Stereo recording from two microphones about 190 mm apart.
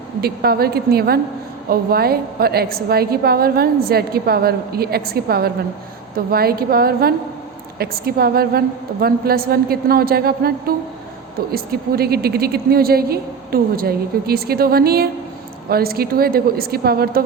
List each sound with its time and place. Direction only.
0.2 s a woman's voice: 55° right (ahead or behind)